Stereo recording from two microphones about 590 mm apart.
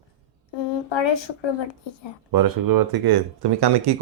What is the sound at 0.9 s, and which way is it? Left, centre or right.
Speech, left.